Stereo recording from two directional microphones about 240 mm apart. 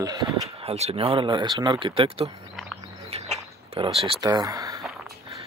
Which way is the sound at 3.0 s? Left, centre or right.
Right.